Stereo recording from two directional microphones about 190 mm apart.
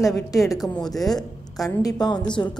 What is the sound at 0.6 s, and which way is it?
A woman's voice, centre (ahead or behind).